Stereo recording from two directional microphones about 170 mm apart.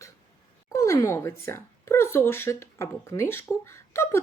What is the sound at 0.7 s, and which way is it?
Speech, 20° left (ahead or behind).